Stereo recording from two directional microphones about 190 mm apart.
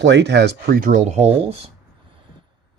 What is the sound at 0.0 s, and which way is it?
Speech, 65° right (ahead or behind).